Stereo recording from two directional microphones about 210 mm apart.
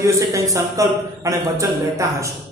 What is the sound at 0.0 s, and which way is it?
A man's voice, 15° right (ahead or behind).